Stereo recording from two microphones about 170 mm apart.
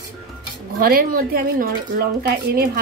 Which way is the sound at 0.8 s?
60° right (ahead or behind).